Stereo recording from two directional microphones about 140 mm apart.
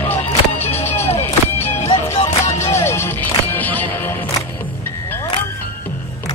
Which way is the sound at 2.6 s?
20° left (ahead or behind).